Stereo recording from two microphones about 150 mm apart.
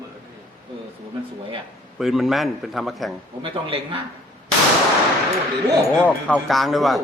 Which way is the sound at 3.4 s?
40° right (ahead or behind).